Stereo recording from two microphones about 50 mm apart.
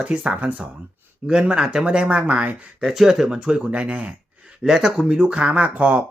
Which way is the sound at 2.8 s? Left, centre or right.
Centre.